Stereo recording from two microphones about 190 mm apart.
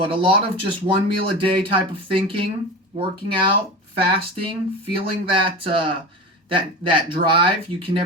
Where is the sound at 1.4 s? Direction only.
30° right (ahead or behind).